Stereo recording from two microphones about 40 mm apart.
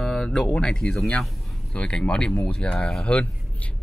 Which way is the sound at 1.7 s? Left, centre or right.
Left.